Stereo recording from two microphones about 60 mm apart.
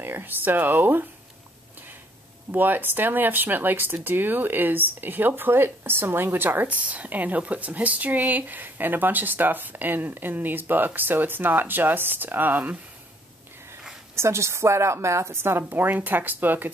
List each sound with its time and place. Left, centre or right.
0.0 s speech: right
2.5 s speech: right
14.1 s a woman's voice: right